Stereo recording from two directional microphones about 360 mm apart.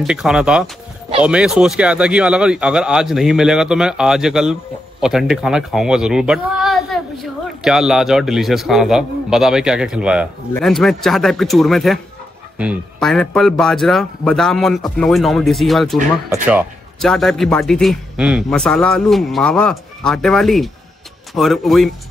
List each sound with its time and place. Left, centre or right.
0.0 s speech: centre